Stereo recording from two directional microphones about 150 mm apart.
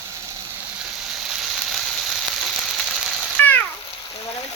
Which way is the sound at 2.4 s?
5° left (ahead or behind).